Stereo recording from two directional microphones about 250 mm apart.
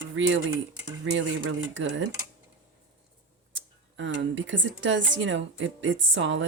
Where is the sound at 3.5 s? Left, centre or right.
Right.